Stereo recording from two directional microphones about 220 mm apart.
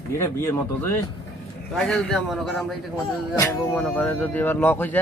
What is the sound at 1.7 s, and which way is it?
A man's voice, 5° left (ahead or behind).